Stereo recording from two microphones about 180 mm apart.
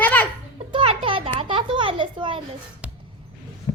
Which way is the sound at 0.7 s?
30° right (ahead or behind).